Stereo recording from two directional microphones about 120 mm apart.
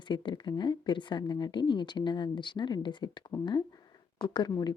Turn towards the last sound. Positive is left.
turn(degrees=30)  # may be behind; listen again after turning